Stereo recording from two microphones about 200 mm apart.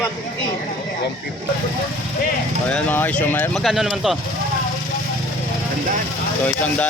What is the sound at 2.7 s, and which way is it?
Speech, 5° left (ahead or behind).